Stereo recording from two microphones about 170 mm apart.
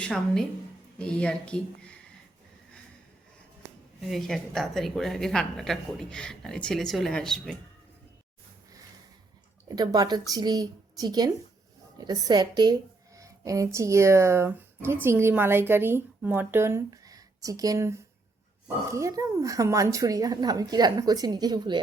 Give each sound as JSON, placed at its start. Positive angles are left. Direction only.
{"t": 0.0, "sound": "a woman's voice", "side_deg": 5}
{"t": 4.1, "sound": "a woman's voice", "side_deg": 0}
{"t": 9.6, "sound": "a woman's voice", "side_deg": -20}